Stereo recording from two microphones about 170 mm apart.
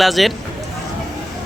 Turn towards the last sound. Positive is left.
turn(degrees=0)  # may be behind; listen again after turning